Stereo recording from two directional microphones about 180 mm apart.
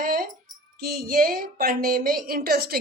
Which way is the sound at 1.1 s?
55° right (ahead or behind).